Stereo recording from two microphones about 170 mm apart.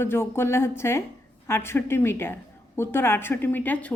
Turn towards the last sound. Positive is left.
turn(degrees=10)  # may be behind; listen again after turning